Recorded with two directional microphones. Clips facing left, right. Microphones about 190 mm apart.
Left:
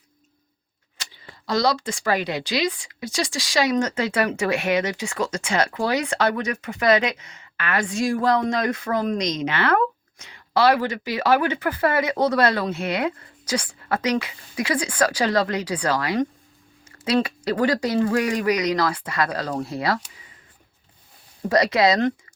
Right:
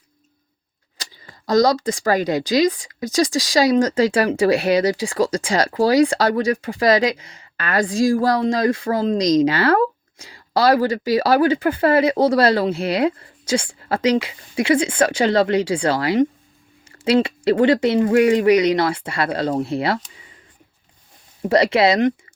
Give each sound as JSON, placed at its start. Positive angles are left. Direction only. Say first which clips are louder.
{"t": 0.9, "sound": "speech", "louder": "right 2 dB", "side_deg": -40}
{"t": 21.5, "sound": "speech", "louder": "right 3 dB", "side_deg": -25}